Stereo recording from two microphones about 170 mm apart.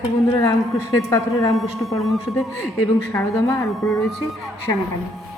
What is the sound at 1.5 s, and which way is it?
Speech, centre (ahead or behind).